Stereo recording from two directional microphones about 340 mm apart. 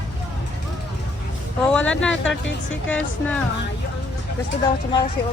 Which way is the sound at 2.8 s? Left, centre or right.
Centre.